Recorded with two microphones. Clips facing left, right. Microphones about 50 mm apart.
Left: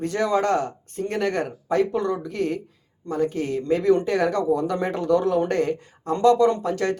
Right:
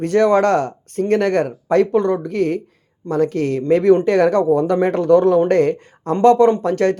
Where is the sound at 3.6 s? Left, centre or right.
Right.